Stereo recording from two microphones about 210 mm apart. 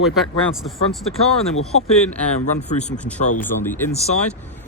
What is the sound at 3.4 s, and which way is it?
Speech, 10° left (ahead or behind).